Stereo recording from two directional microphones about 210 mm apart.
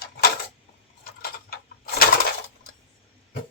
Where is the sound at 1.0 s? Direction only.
45° left (ahead or behind).